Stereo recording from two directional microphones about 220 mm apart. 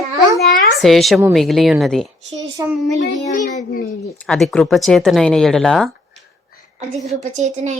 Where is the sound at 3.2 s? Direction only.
35° left (ahead or behind).